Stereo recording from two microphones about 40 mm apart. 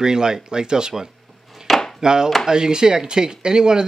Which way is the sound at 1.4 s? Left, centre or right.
Centre.